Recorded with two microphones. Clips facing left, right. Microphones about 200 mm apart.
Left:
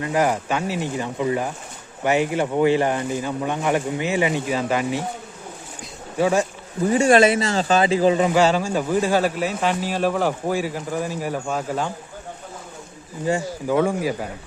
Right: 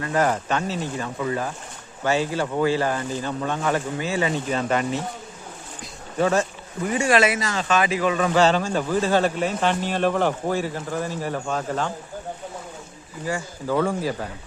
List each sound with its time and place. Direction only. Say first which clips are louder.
0.0 s speech: left 1 dB; 10° left (ahead or behind)
6.1 s speech: left 1 dB; 10° left (ahead or behind)
6.8 s speech: left 5 dB; 30° left (ahead or behind)
8.3 s speech: left 1 dB; 10° left (ahead or behind)
13.2 s speech: left 5 dB; 20° left (ahead or behind)